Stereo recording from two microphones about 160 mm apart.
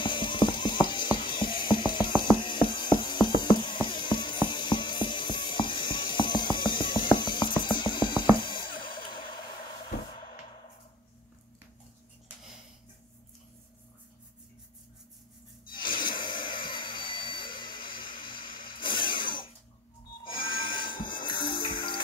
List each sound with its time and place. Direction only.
0.0 s ratchet: 30° left (ahead or behind)
15.7 s a sound: 30° left (ahead or behind)
20.2 s music: 30° left (ahead or behind)